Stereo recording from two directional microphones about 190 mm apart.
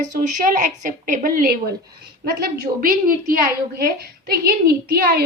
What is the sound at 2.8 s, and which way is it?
A woman's voice, 50° right (ahead or behind).